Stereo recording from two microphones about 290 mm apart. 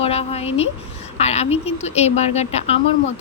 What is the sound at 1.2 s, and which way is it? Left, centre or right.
Speech, left.